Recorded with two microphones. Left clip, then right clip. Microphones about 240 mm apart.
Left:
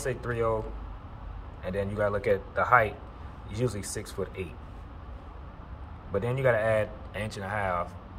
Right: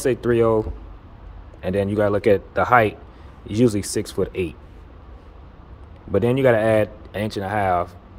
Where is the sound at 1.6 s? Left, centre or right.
Right.